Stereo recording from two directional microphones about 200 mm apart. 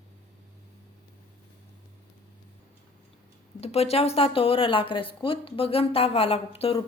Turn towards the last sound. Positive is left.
turn(degrees=30)  # may be behind; listen again after turning